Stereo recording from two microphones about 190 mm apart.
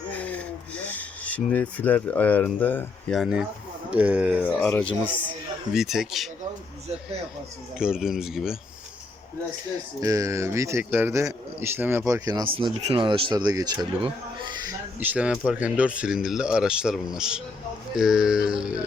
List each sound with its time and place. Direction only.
0.1 s rub: 5° left (ahead or behind)
3.2 s a man's voice: 5° right (ahead or behind)
4.4 s speech: 5° left (ahead or behind)
7.8 s speech: 5° right (ahead or behind)
10.0 s a man's voice: 15° right (ahead or behind)
15.0 s speech: 5° right (ahead or behind)